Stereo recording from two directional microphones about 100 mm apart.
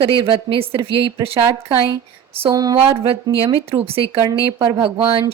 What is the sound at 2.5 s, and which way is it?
Speech, 35° right (ahead or behind).